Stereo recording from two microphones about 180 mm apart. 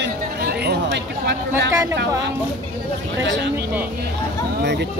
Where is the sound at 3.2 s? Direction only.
80° right.